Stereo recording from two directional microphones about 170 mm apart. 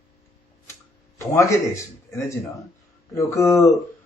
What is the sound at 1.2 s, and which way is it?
Speech, 20° left (ahead or behind).